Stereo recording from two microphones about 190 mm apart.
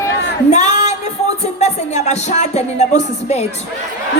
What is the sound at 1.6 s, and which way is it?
Music, 35° left (ahead or behind).